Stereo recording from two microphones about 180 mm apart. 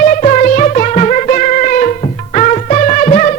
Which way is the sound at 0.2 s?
45° left (ahead or behind).